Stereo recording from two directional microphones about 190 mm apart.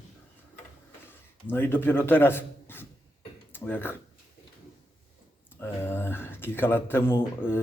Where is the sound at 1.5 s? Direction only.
10° left (ahead or behind).